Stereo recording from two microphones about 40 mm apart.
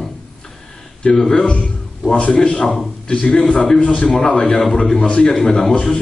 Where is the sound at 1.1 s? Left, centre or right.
Centre.